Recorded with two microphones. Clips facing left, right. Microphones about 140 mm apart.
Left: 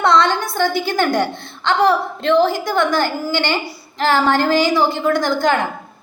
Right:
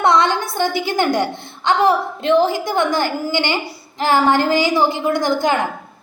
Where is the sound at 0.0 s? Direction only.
20° right (ahead or behind).